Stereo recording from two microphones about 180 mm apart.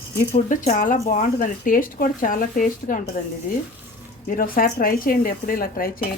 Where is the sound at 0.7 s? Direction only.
45° left (ahead or behind).